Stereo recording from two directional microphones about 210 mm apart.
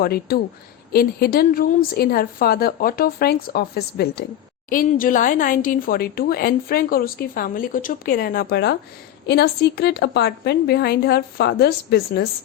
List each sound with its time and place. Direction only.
0.0 s speech: 45° left (ahead or behind)